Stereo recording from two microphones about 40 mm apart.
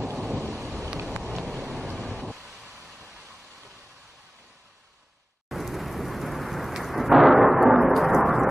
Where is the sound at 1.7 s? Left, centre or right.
Centre.